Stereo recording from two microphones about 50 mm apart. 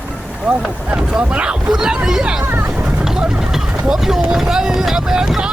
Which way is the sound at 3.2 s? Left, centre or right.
Centre.